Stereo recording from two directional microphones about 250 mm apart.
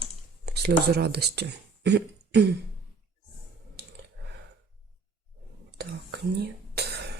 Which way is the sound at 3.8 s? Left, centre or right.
Right.